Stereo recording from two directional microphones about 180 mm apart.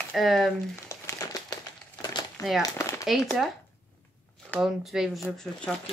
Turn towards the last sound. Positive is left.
turn(degrees=5)  # may be behind; listen again after turning